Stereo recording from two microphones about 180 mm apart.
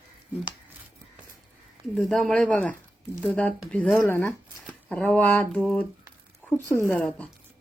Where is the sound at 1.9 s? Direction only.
Centre (ahead or behind).